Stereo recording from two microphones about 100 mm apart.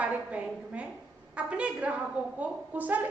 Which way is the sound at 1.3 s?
10° right (ahead or behind).